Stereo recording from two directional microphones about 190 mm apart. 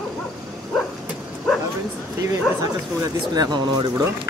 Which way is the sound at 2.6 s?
20° right (ahead or behind).